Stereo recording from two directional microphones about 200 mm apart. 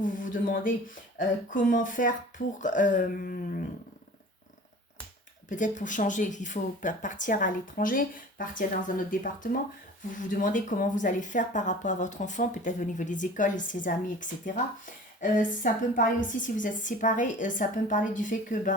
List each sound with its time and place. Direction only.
0.0 s speech: 40° left (ahead or behind)
5.5 s speech: 40° left (ahead or behind)